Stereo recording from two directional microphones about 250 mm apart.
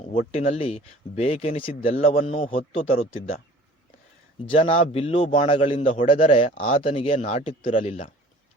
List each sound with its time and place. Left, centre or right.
0.0 s a man's voice: left
4.4 s a man's voice: left